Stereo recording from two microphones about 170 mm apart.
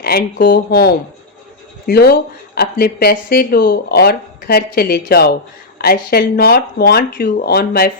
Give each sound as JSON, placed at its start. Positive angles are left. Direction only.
{"t": 0.0, "sound": "speech", "side_deg": 65}